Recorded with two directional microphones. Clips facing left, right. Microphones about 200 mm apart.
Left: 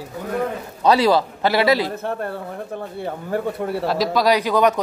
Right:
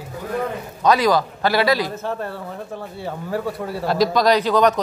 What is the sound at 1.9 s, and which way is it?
Speech, 55° left (ahead or behind).